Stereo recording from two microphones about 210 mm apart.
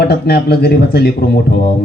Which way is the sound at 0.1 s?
50° left (ahead or behind).